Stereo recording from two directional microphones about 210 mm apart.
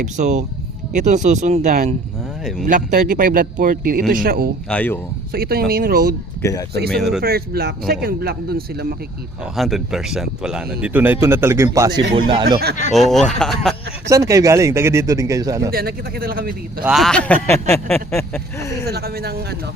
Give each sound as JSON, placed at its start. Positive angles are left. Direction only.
{"t": 0.0, "sound": "a man's voice", "side_deg": -35}
{"t": 4.7, "sound": "speech", "side_deg": 10}
{"t": 5.3, "sound": "speech", "side_deg": -45}
{"t": 6.4, "sound": "speech", "side_deg": 15}
{"t": 6.9, "sound": "speech", "side_deg": 0}
{"t": 7.2, "sound": "speech", "side_deg": -50}
{"t": 9.6, "sound": "a man's voice", "side_deg": 0}
{"t": 12.5, "sound": "speech", "side_deg": -45}
{"t": 12.9, "sound": "speech", "side_deg": 0}
{"t": 14.1, "sound": "a man's voice", "side_deg": -15}
{"t": 15.7, "sound": "speech", "side_deg": -45}
{"t": 16.8, "sound": "speech", "side_deg": 0}
{"t": 18.9, "sound": "speech", "side_deg": -45}